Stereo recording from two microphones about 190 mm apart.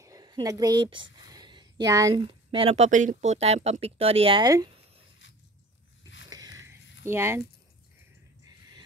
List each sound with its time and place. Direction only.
0.0 s a woman's voice: 20° right (ahead or behind)
6.2 s biting: 20° right (ahead or behind)
7.1 s speech: 15° right (ahead or behind)